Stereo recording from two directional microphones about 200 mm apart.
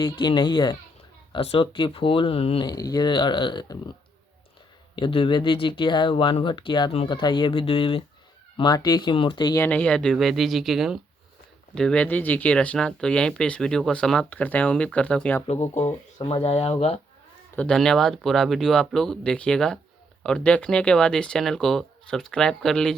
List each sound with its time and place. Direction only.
0.0 s speech: 25° left (ahead or behind)
4.9 s speech: 25° left (ahead or behind)
9.6 s speech: 5° left (ahead or behind)
15.6 s speech: 35° left (ahead or behind)
17.6 s speech: 5° left (ahead or behind)